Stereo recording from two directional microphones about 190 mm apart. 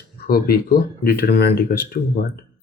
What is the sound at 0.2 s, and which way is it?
Speech, 55° left (ahead or behind).